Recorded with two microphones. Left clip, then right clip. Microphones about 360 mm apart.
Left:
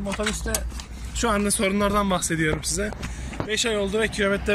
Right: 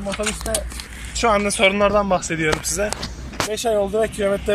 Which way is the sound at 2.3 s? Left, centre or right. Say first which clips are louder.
Right 4 dB; right.